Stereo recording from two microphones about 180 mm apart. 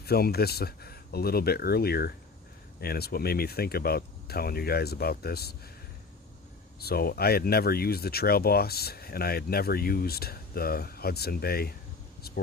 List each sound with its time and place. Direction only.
0.0 s speech: 60° left (ahead or behind)
6.7 s speech: 60° left (ahead or behind)